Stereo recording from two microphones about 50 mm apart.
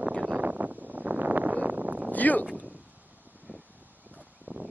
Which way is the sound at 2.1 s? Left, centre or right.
Left.